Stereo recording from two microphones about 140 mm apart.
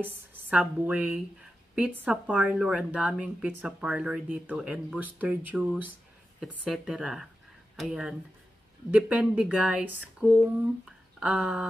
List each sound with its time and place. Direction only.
0.0 s a woman's voice: 15° right (ahead or behind)